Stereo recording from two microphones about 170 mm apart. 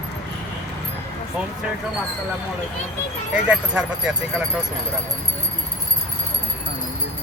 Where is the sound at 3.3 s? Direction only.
5° right (ahead or behind).